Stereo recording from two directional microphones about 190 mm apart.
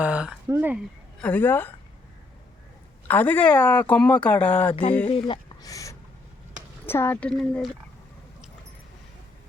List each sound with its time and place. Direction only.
0.0 s speech: 5° right (ahead or behind)
1.2 s speech: 10° left (ahead or behind)
3.1 s speech: 10° left (ahead or behind)
4.7 s speech: 30° left (ahead or behind)
5.0 s a sound: 25° left (ahead or behind)
6.8 s speech: 10° left (ahead or behind)